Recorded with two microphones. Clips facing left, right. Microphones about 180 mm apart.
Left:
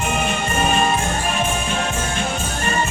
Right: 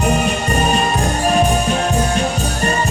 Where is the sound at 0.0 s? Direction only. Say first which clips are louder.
Right 5 dB; 35° right (ahead or behind).